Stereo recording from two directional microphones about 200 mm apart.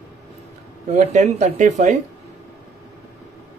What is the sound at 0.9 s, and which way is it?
A man's voice, 35° right (ahead or behind).